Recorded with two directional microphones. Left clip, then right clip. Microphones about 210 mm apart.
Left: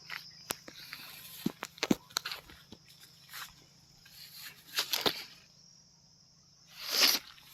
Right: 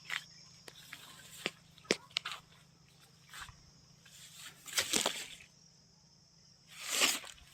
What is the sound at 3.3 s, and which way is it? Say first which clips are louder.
Wild animals: left 3 dB; 45° left (ahead or behind).